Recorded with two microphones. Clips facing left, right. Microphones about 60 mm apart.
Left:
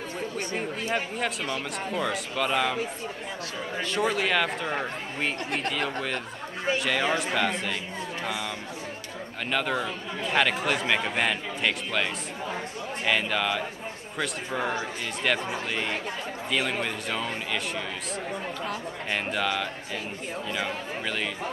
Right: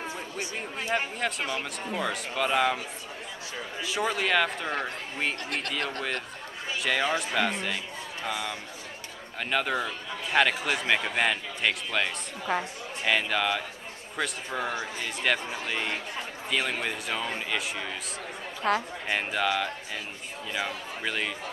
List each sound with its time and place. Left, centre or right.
1.9 s a man's voice: centre
3.8 s a man's voice: centre
6.8 s a man's voice: centre
18.7 s a woman's voice: right
19.0 s a man's voice: centre